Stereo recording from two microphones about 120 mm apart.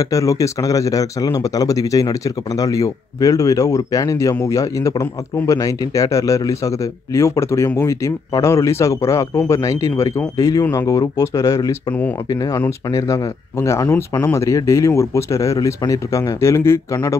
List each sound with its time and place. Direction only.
0.0 s speech: 30° left (ahead or behind)
11.9 s speech: 15° left (ahead or behind)
12.3 s speech: 30° left (ahead or behind)